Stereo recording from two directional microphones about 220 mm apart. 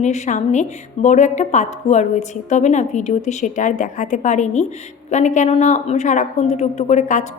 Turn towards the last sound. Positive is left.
turn(degrees=35)  # may be behind; listen again after turning